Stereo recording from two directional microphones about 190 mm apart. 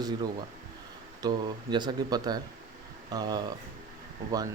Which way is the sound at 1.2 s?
20° right (ahead or behind).